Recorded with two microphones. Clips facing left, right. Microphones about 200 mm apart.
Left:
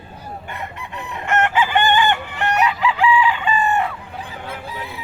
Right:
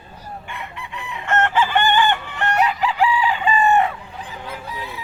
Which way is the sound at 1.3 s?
15° left (ahead or behind).